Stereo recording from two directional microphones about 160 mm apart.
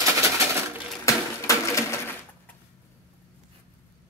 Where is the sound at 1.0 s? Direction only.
20° left (ahead or behind).